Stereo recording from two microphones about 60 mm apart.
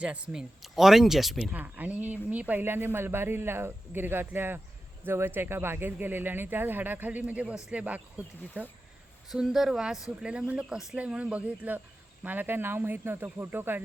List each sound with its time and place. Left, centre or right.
0.0 s speech: centre
0.6 s speech: centre
1.6 s speech: right
9.3 s speech: centre
10.9 s speech: right